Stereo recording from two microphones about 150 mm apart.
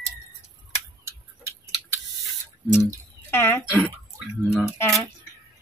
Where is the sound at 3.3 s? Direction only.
15° left (ahead or behind).